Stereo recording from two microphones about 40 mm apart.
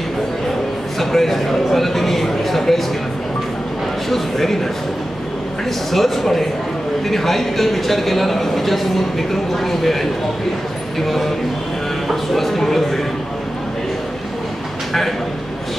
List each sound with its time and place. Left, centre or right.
0.9 s speech: centre
4.1 s speech: centre
5.9 s speech: centre